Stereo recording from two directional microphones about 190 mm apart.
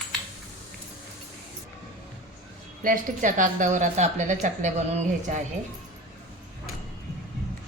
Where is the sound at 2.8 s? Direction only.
45° right (ahead or behind).